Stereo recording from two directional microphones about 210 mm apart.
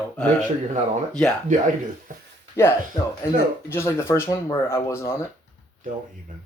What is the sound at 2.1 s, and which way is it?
Speech, 40° right (ahead or behind).